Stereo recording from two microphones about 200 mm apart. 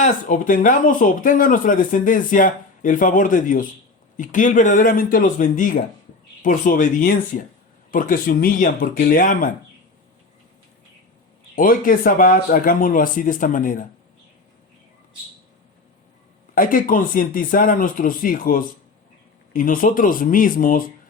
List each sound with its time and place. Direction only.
0.0 s speech: 40° left (ahead or behind)
11.5 s speech: 45° left (ahead or behind)
16.6 s speech: 45° left (ahead or behind)